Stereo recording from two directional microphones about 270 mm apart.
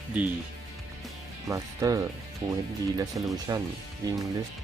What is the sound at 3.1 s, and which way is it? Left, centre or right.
Speech, centre.